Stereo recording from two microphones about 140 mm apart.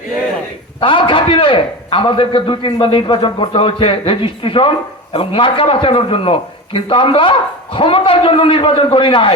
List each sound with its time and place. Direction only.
0.8 s a man's voice: 35° left (ahead or behind)